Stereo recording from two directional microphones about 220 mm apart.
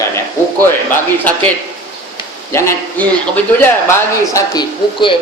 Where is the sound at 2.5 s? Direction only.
10° left (ahead or behind).